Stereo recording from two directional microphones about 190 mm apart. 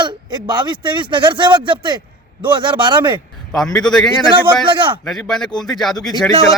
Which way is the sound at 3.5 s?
5° left (ahead or behind).